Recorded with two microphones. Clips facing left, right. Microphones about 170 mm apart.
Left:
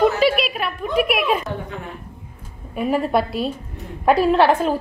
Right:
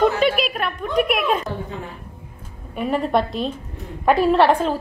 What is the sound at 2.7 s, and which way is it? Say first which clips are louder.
A woman's voice: left 1 dB; 5° left (ahead or behind).